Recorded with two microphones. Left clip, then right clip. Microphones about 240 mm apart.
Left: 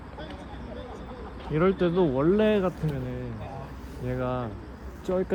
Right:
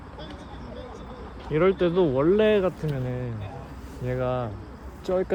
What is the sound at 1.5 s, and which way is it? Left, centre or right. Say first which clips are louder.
Speech: right 3 dB; right.